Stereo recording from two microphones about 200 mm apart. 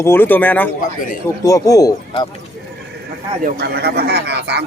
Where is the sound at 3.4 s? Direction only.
55° right (ahead or behind).